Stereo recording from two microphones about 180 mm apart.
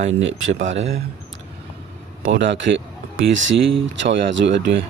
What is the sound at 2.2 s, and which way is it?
Speech, 85° right.